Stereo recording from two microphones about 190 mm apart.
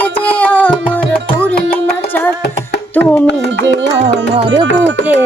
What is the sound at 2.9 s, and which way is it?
Music, 10° left (ahead or behind).